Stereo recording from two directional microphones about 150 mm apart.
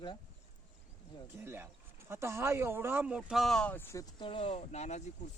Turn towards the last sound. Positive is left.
turn(degrees=50)  # may be behind; listen again after turning